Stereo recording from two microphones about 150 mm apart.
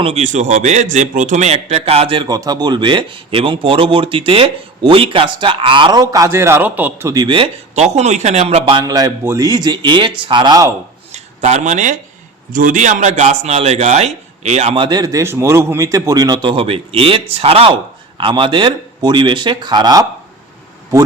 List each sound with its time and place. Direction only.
0.0 s a man's voice: 45° right (ahead or behind)
2.2 s speech: 25° right (ahead or behind)
7.1 s speech: 30° right (ahead or behind)
11.1 s speech: 50° right (ahead or behind)
12.5 s a man's voice: 65° right (ahead or behind); by 14.8 s 45° right (ahead or behind)
14.8 s a man's voice: 25° right (ahead or behind)